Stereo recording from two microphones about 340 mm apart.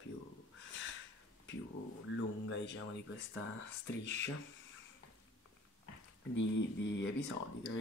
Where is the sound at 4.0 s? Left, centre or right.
Left.